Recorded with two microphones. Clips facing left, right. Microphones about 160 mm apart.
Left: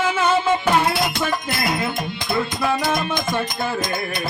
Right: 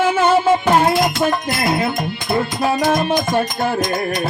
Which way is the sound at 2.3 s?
35° right (ahead or behind).